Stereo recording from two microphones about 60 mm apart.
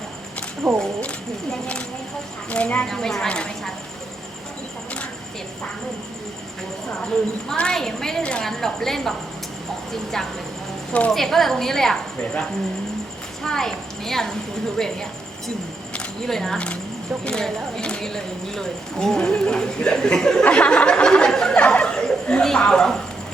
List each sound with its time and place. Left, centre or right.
0.6 s speech: centre
2.5 s a woman's voice: left
2.8 s speech: centre
7.0 s speech: centre
8.4 s a woman's voice: centre
16.2 s speech: centre
20.4 s a sound: centre